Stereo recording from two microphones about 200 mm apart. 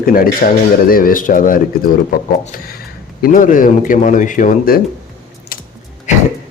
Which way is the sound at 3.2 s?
40° left (ahead or behind).